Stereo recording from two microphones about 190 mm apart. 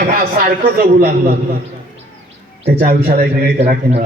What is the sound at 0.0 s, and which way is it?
A man's voice, 50° right (ahead or behind).